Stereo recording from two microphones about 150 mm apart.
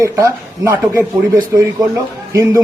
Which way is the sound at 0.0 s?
20° right (ahead or behind).